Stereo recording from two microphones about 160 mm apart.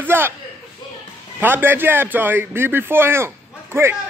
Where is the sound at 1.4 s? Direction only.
10° right (ahead or behind).